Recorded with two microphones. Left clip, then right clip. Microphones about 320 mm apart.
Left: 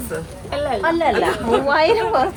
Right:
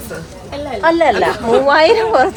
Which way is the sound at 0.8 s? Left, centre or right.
Right.